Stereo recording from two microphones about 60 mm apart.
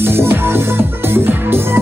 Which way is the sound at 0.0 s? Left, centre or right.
Right.